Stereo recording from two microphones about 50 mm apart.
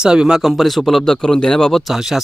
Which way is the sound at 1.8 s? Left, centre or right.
Centre.